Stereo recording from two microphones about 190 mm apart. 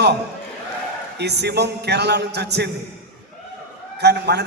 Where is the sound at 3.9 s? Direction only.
60° right (ahead or behind).